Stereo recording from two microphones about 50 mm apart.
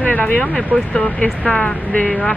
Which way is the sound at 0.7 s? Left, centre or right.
Centre.